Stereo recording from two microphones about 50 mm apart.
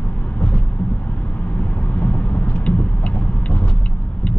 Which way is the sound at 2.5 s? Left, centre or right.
Left.